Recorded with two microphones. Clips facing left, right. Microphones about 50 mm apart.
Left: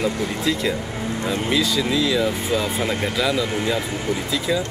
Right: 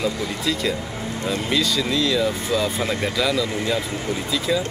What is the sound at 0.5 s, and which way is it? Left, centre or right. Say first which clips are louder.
Speech: even; centre.